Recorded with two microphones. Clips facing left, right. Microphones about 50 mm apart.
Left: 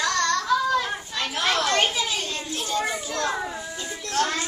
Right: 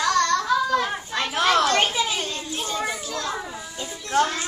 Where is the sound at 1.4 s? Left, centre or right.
Centre.